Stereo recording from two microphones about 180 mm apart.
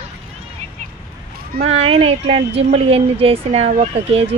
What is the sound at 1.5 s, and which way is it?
Speech, 35° right (ahead or behind).